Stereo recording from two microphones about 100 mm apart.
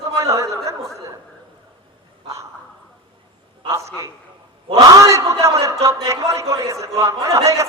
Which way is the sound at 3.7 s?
35° right (ahead or behind).